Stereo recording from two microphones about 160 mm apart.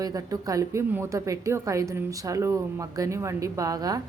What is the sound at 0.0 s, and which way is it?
A woman's voice, 20° right (ahead or behind).